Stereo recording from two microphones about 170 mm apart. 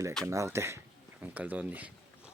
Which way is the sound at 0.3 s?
15° right (ahead or behind).